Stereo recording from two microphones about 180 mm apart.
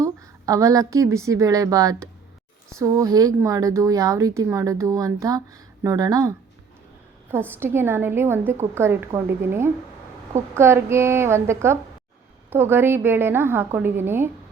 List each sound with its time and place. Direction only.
0.0 s a woman's voice: 20° right (ahead or behind)
7.6 s a woman's voice: 10° right (ahead or behind)